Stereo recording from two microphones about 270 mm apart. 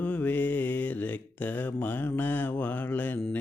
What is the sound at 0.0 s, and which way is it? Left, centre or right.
Mantra, centre.